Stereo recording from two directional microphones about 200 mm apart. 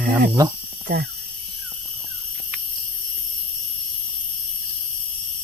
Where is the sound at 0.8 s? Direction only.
55° right (ahead or behind).